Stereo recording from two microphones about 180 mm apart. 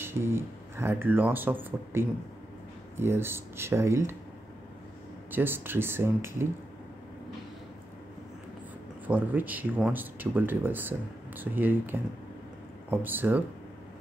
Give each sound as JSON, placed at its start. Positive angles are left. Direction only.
{"t": 0.0, "sound": "speech", "side_deg": -15}
{"t": 5.3, "sound": "speech", "side_deg": -10}
{"t": 9.0, "sound": "speech", "side_deg": -10}